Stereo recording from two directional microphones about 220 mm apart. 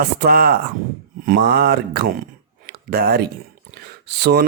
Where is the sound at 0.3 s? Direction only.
45° right (ahead or behind).